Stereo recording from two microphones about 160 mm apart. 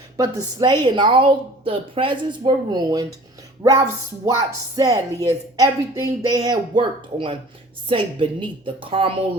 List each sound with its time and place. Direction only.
0.2 s a woman's voice: 25° right (ahead or behind)